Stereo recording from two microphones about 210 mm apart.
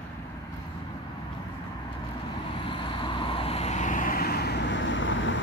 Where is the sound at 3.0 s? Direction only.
25° left (ahead or behind); by 5.4 s 65° left (ahead or behind).